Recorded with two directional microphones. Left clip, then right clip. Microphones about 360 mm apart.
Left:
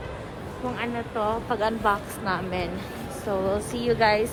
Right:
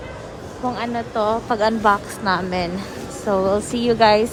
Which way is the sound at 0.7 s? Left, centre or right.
Centre.